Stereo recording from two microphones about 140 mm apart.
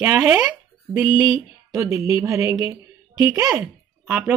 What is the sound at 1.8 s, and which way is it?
Speech, 20° right (ahead or behind).